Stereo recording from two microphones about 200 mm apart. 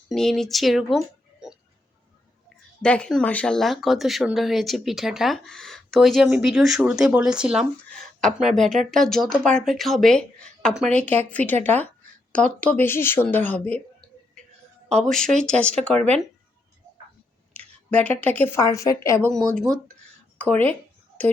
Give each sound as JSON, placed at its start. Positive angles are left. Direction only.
{"t": 0.1, "sound": "speech", "side_deg": 0}
{"t": 2.8, "sound": "speech", "side_deg": 5}
{"t": 14.8, "sound": "a woman's voice", "side_deg": 5}
{"t": 16.0, "sound": "speech", "side_deg": -35}
{"t": 17.5, "sound": "speech", "side_deg": 5}
{"t": 20.4, "sound": "speech", "side_deg": 10}